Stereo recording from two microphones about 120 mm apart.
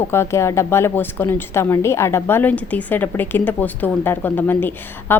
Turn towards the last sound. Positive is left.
turn(degrees=15)  # may be behind; listen again after turning